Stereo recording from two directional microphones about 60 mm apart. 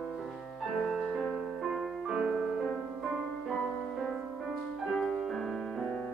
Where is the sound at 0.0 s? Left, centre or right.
Centre.